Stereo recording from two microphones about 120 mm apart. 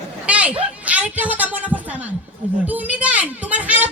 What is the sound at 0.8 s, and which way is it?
A woman's voice, 10° right (ahead or behind).